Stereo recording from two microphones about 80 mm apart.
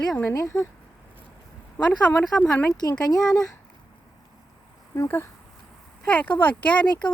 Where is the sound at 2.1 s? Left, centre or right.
Left.